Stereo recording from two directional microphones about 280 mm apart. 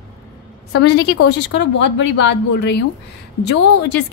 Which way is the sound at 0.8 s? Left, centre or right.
Left.